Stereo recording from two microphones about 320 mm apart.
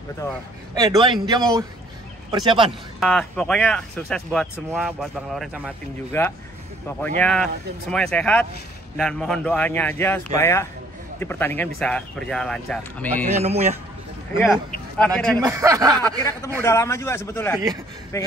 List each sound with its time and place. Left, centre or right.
0.7 s speech: centre
3.0 s a man's voice: centre
13.4 s a man's voice: centre
14.4 s speech: centre
15.4 s speech: centre
16.6 s a man's voice: centre